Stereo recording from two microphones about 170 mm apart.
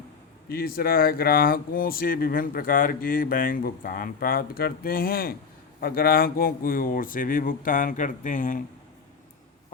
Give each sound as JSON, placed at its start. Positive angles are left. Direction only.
{"t": 0.4, "sound": "speech", "side_deg": 65}